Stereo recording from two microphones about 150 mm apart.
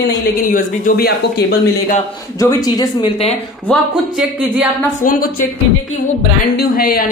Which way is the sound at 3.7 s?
5° left (ahead or behind).